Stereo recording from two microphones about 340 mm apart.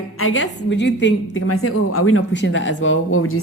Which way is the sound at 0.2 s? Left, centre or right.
Left.